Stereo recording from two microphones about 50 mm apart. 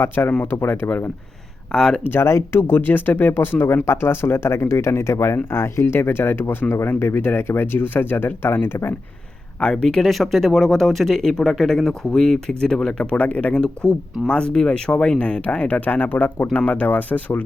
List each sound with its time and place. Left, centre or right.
0.2 s speech: left
1.7 s speech: centre
2.0 s speech: left
6.6 s speech: left
7.0 s speech: left
9.8 s speech: centre
10.1 s speech: centre; by 13.6 s left
13.8 s speech: centre
14.3 s speech: centre